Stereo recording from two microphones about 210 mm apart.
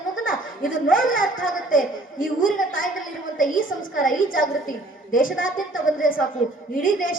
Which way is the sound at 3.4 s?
40° left (ahead or behind).